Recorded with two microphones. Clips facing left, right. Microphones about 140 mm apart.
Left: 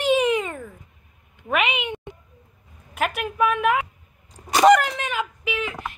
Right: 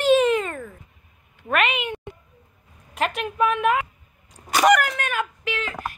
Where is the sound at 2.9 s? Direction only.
5° left (ahead or behind).